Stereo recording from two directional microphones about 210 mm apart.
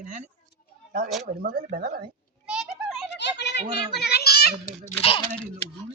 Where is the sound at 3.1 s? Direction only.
55° left (ahead or behind).